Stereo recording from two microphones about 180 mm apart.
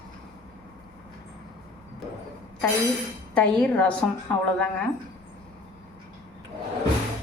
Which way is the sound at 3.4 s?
5° left (ahead or behind).